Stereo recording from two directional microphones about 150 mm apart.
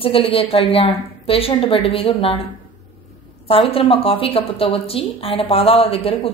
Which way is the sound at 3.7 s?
40° left (ahead or behind).